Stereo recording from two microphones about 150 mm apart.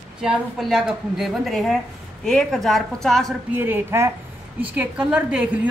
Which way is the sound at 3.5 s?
15° right (ahead or behind).